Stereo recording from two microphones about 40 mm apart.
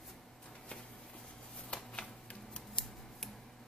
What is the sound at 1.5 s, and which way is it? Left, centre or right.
Scissors, left.